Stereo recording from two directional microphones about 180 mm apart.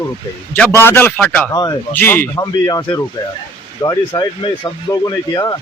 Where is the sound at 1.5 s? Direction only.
20° left (ahead or behind).